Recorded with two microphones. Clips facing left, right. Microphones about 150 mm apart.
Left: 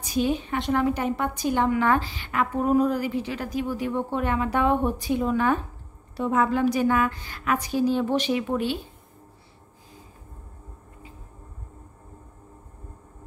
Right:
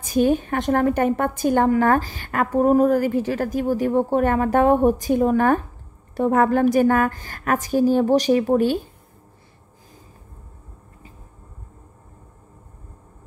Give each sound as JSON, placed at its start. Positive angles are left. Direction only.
{"t": 0.0, "sound": "a woman's voice", "side_deg": -50}